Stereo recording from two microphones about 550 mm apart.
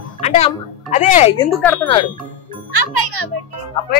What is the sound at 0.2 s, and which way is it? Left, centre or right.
Speech, centre.